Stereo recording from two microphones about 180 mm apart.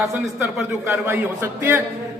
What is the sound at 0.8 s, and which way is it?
A man's voice, 10° right (ahead or behind).